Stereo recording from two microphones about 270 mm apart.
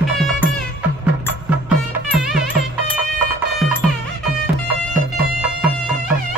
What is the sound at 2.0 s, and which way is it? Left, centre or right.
Music, centre.